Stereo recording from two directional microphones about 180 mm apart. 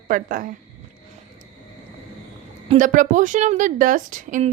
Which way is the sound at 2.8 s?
45° right (ahead or behind).